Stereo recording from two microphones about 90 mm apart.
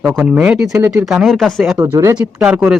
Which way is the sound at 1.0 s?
Centre (ahead or behind).